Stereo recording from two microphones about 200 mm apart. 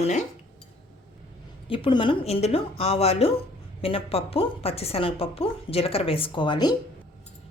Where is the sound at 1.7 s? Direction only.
25° left (ahead or behind).